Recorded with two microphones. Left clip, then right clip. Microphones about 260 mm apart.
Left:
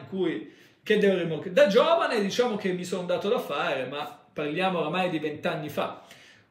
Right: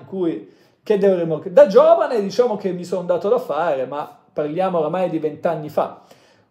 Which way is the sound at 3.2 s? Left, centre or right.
Centre.